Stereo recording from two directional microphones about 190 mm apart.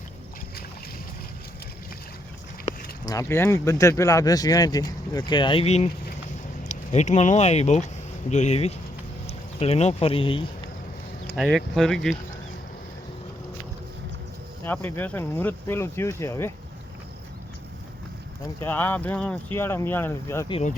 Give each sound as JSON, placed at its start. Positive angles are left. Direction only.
{"t": 2.7, "sound": "a sound", "side_deg": 35}
{"t": 3.1, "sound": "speech", "side_deg": 15}
{"t": 11.3, "sound": "speech", "side_deg": 0}
{"t": 14.6, "sound": "speech", "side_deg": 10}
{"t": 18.6, "sound": "speech", "side_deg": 10}
{"t": 20.5, "sound": "speech", "side_deg": 35}